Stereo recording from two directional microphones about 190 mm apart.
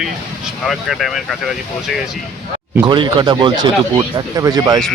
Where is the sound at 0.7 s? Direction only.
Centre (ahead or behind).